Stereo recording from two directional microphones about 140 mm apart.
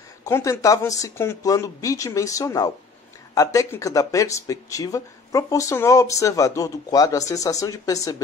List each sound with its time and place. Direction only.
0.2 s speech: 20° left (ahead or behind)